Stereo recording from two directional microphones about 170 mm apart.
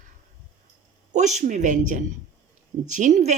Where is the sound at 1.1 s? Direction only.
45° right (ahead or behind).